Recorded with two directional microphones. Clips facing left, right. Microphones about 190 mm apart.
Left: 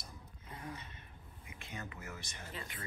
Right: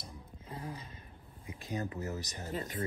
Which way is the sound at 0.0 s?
30° right (ahead or behind).